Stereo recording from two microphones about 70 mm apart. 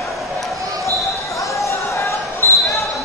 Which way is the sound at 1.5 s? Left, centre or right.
Left.